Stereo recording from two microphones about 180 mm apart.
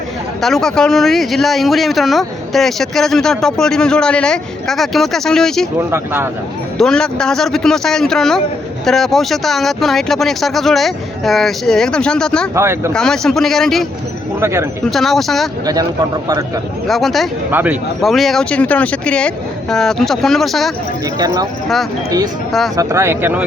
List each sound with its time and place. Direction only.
0.4 s speech: 5° left (ahead or behind)
6.7 s speech: 5° left (ahead or behind)
12.5 s speech: 15° right (ahead or behind)
12.9 s speech: 5° left (ahead or behind)
14.4 s speech: 15° right (ahead or behind)
14.8 s speech: centre (ahead or behind)
15.6 s a man's voice: 20° right (ahead or behind)
16.8 s speech: centre (ahead or behind)
17.5 s speech: 10° right (ahead or behind)
18.0 s speech: centre (ahead or behind)
21.2 s a man's voice: 20° right (ahead or behind)
22.8 s speech: 15° right (ahead or behind)